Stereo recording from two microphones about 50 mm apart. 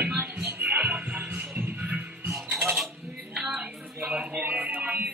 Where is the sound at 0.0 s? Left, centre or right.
Right.